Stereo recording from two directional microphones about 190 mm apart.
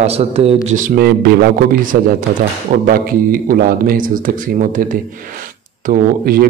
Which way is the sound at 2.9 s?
50° right (ahead or behind).